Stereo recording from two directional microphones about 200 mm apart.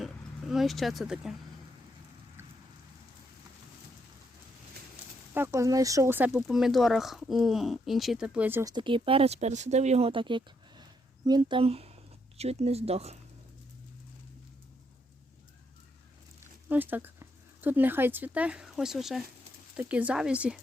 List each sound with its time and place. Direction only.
0.0 s speech: centre (ahead or behind)
5.3 s speech: 15° right (ahead or behind)
8.7 s speech: 25° right (ahead or behind)
16.6 s speech: 10° right (ahead or behind)